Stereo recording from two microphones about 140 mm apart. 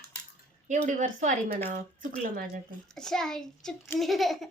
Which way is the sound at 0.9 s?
60° right (ahead or behind).